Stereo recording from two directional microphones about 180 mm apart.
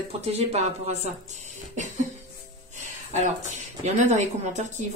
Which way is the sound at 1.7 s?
45° right (ahead or behind).